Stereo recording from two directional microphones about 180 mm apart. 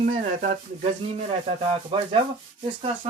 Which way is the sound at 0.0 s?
50° right (ahead or behind).